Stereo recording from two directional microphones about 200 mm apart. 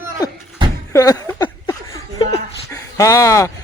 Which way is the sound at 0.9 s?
15° left (ahead or behind).